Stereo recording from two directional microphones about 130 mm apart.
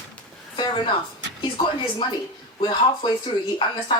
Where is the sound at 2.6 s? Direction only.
35° left (ahead or behind).